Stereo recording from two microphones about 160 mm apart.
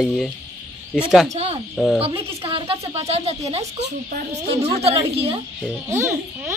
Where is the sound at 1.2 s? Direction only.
40° right (ahead or behind).